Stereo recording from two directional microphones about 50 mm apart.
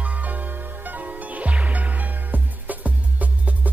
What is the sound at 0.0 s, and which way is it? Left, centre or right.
Music, right.